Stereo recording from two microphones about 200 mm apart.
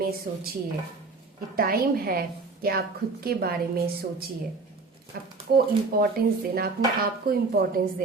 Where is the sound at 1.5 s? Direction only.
45° right (ahead or behind).